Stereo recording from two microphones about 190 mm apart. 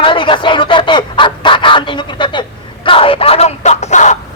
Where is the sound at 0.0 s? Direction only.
25° left (ahead or behind).